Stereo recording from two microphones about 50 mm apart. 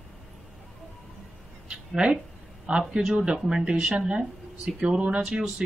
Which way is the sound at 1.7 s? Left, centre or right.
Right.